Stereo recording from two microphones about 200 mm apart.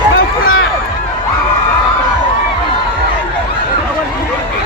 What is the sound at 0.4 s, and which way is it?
Run, 80° left.